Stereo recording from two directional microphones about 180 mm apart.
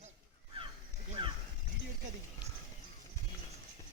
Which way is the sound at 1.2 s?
25° right (ahead or behind).